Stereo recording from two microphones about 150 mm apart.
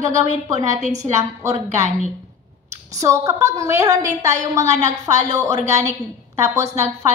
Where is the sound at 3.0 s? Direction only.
20° right (ahead or behind).